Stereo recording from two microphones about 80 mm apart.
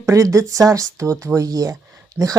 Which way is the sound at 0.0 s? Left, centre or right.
Right.